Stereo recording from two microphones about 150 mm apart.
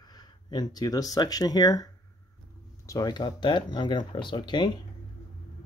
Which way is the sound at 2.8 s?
25° left (ahead or behind).